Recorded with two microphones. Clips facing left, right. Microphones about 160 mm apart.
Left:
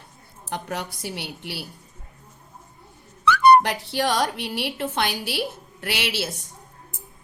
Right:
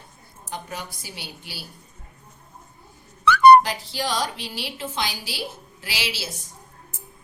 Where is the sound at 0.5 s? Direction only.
70° left (ahead or behind).